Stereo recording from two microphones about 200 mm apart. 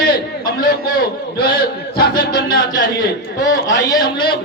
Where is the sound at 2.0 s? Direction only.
20° left (ahead or behind).